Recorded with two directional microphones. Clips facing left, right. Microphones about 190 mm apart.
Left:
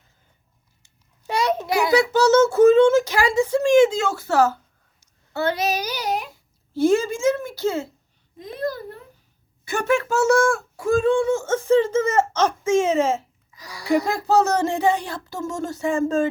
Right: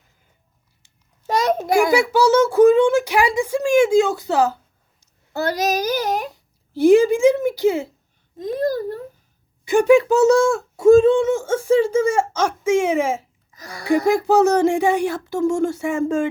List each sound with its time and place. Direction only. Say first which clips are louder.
1.3 s a sound: right 4 dB; 45° right (ahead or behind)
2.0 s speech: even; 10° right (ahead or behind)
5.3 s speech: right 2 dB; 40° right (ahead or behind)
6.7 s speech: right 6 dB; 15° right (ahead or behind)
8.6 s a sound: right 5 dB; 40° right (ahead or behind)
9.6 s speech: right 8 dB; 15° right (ahead or behind)
13.5 s speech: right 2 dB; 50° right (ahead or behind)
14.1 s speech: right 4 dB; 15° right (ahead or behind)